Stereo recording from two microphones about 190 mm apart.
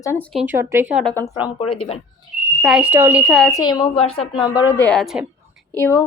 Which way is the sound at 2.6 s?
5° right (ahead or behind).